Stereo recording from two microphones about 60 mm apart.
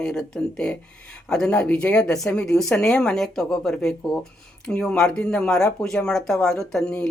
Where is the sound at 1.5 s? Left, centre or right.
Left.